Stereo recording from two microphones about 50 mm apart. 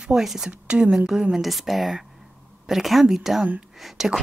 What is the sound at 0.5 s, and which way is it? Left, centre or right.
Speech, right.